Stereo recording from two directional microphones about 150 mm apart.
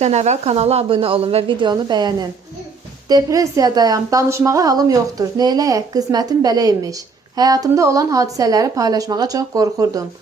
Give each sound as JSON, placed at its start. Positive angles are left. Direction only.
{"t": 0.0, "sound": "a woman's voice", "side_deg": -50}